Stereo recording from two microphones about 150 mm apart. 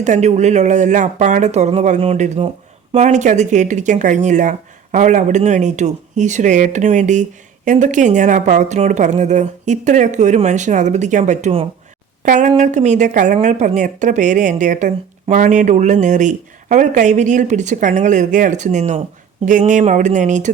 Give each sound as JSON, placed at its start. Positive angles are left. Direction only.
{"t": 0.0, "sound": "speech", "side_deg": -50}